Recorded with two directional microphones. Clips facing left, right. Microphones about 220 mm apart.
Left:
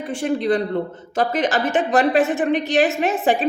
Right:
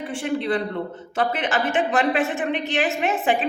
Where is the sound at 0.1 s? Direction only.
40° left (ahead or behind).